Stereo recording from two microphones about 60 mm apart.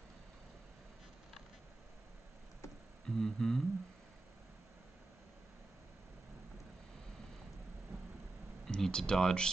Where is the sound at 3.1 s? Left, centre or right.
Centre.